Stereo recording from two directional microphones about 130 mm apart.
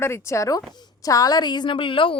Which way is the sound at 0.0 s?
20° left (ahead or behind).